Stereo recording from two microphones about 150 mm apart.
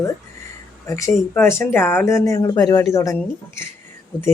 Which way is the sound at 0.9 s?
20° left (ahead or behind).